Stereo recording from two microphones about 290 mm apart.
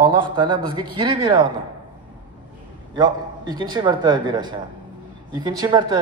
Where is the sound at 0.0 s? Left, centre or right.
Centre.